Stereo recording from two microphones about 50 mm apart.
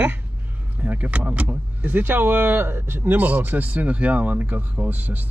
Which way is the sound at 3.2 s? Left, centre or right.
Right.